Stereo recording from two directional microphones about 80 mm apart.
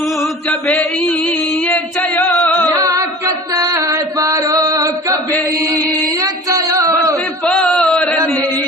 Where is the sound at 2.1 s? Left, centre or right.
Left.